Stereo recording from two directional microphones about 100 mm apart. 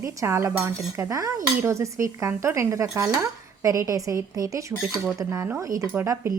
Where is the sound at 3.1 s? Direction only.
30° right (ahead or behind).